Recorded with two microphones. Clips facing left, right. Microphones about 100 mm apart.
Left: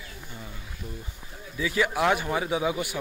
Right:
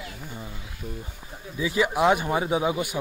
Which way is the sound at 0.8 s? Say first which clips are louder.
Right 4 dB; 15° right (ahead or behind).